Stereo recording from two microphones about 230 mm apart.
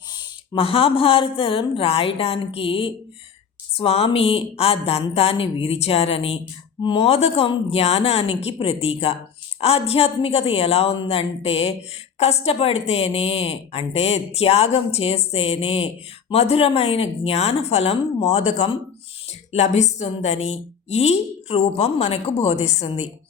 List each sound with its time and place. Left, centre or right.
0.5 s a woman's voice: left